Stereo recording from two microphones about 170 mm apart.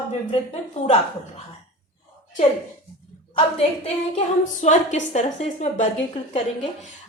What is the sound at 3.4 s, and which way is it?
A woman's voice, 35° left (ahead or behind).